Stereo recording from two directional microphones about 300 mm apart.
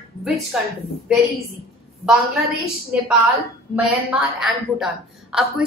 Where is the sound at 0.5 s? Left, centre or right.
Centre.